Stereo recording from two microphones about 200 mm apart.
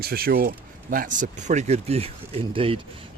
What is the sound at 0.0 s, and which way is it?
Speech, 50° right (ahead or behind).